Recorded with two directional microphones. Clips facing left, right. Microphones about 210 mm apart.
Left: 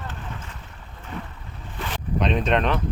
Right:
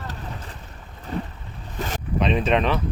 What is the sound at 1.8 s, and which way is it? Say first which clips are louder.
Boat: right 3 dB; 45° right (ahead or behind).